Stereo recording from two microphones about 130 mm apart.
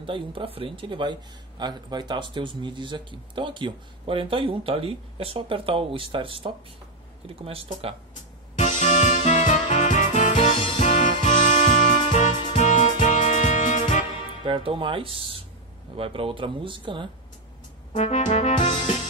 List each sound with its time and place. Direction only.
0.0 s speech: 40° right (ahead or behind)
8.5 s music: 75° left (ahead or behind)
10.4 s music: 45° left (ahead or behind)
10.8 s music: 75° left (ahead or behind)
14.4 s speech: 45° right (ahead or behind)
17.9 s brass instrument: 65° left (ahead or behind)